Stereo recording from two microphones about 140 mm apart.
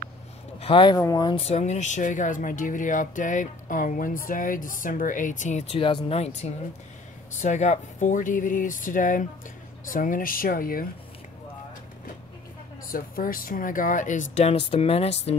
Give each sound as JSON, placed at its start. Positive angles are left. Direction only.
{"t": 0.6, "sound": "speech", "side_deg": 40}
{"t": 1.4, "sound": "speech", "side_deg": 50}
{"t": 12.9, "sound": "speech", "side_deg": 85}